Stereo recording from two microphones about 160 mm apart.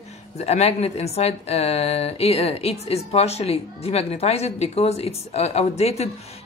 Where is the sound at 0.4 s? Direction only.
40° left (ahead or behind).